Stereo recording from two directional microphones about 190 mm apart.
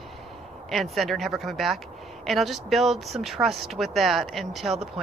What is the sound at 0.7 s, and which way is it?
Speech, centre (ahead or behind).